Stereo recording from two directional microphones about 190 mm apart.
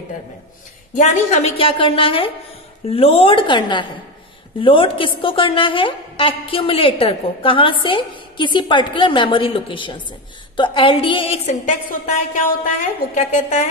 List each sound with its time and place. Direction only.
0.9 s a woman's voice: 40° left (ahead or behind)
11.4 s a woman's voice: 40° left (ahead or behind)